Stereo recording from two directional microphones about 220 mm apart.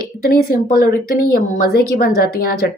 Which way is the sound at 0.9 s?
45° left (ahead or behind).